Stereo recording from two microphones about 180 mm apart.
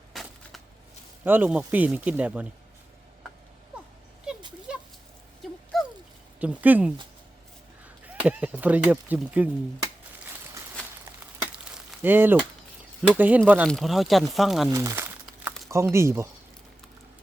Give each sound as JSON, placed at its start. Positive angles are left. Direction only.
{"t": 0.1, "sound": "a sound", "side_deg": 0}
{"t": 1.2, "sound": "speech", "side_deg": -10}
{"t": 4.7, "sound": "a sound", "side_deg": -5}
{"t": 6.4, "sound": "speech", "side_deg": -10}
{"t": 8.0, "sound": "speech", "side_deg": -10}
{"t": 11.7, "sound": "a sound", "side_deg": -5}
{"t": 13.0, "sound": "speech", "side_deg": -10}
{"t": 14.7, "sound": "speech", "side_deg": -15}
{"t": 15.3, "sound": "crumpling", "side_deg": 0}
{"t": 15.7, "sound": "speech", "side_deg": -15}